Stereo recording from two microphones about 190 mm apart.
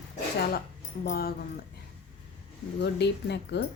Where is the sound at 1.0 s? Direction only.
50° left (ahead or behind).